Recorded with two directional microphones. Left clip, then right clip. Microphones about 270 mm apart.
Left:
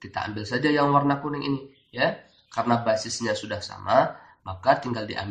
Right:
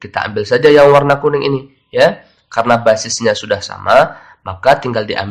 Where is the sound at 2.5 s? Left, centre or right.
Right.